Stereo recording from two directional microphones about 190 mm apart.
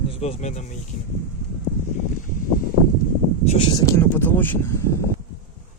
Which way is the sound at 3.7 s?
15° left (ahead or behind).